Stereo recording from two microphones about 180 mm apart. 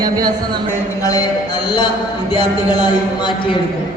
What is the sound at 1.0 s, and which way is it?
Speech, 20° left (ahead or behind).